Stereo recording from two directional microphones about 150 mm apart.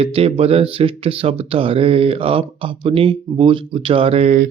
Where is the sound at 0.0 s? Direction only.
40° right (ahead or behind).